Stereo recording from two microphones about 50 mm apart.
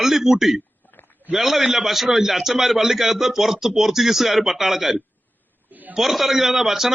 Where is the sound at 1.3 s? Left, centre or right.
Centre.